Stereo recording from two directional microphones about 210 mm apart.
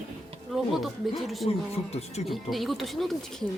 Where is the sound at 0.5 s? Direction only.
Centre (ahead or behind).